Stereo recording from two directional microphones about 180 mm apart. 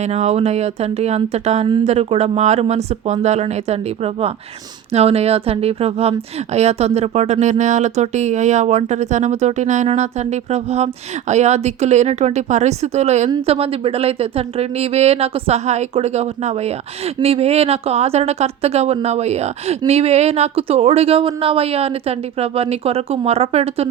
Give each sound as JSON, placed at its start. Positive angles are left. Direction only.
{"t": 0.0, "sound": "speech", "side_deg": -40}